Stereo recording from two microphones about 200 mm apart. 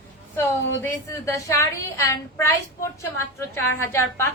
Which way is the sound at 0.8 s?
15° left (ahead or behind).